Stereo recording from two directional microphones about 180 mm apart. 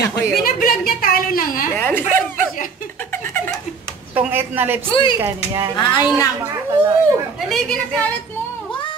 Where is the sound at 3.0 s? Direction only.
10° left (ahead or behind).